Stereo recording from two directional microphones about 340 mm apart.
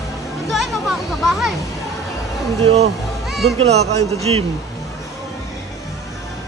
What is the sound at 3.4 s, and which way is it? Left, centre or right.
Speech, right.